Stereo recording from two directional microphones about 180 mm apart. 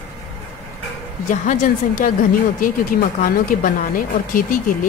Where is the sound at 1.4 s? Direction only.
45° left (ahead or behind).